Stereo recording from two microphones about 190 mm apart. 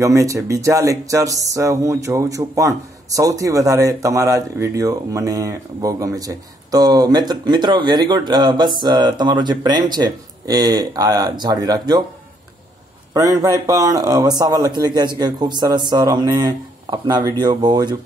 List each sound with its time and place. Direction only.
0.0 s speech: 15° right (ahead or behind)
13.1 s speech: 20° right (ahead or behind)